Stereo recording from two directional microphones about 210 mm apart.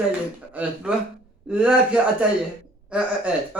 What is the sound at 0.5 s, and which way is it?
A man's voice, 5° right (ahead or behind).